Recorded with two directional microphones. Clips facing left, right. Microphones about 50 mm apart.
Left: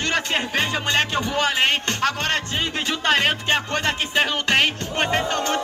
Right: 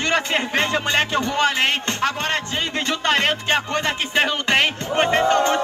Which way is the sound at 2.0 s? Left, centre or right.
Centre.